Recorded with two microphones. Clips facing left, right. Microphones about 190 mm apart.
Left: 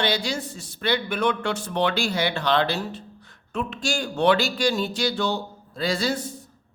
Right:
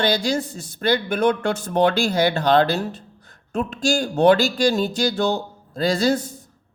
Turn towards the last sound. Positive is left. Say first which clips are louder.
# right 6 dB
turn(degrees=-45)  # may be behind; listen again after turning